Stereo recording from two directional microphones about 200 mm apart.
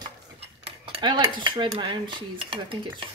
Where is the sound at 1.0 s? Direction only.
25° right (ahead or behind).